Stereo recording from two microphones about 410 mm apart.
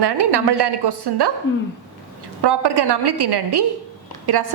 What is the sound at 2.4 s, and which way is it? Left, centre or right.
A woman's voice, right.